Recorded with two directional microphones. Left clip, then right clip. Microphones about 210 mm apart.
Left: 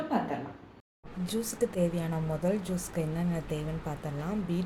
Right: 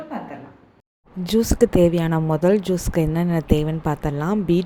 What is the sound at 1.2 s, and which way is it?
Speech, 35° right (ahead or behind).